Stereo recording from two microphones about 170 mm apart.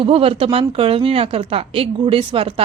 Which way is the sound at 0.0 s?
35° right (ahead or behind).